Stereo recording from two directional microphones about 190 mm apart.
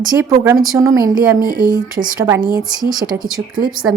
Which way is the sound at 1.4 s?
45° right (ahead or behind).